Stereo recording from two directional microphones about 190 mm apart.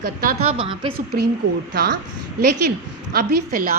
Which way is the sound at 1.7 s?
55° right (ahead or behind).